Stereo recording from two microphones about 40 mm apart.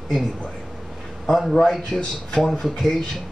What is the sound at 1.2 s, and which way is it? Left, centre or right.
A man's voice, centre.